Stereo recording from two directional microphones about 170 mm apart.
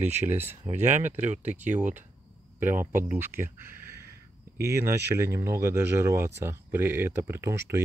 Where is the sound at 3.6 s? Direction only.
15° right (ahead or behind).